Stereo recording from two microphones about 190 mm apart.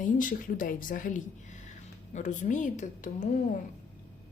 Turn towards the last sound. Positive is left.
turn(degrees=40)  # may be behind; listen again after turning